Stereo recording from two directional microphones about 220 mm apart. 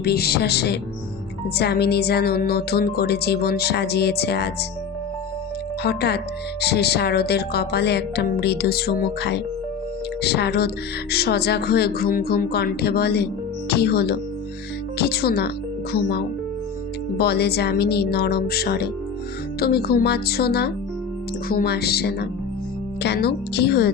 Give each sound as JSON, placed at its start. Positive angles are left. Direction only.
{"t": 0.0, "sound": "a woman's voice", "side_deg": 45}
{"t": 5.8, "sound": "a woman's voice", "side_deg": 50}